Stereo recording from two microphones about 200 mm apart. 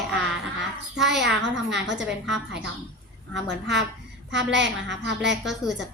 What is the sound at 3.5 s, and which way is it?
A woman's voice, 60° right (ahead or behind).